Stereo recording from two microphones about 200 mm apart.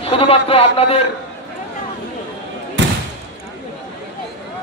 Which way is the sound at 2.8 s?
65° right (ahead or behind).